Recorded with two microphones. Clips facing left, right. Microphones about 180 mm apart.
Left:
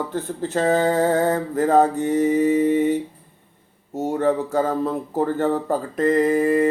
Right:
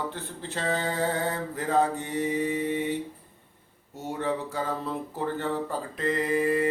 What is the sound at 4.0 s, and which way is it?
Mantra, 45° left (ahead or behind).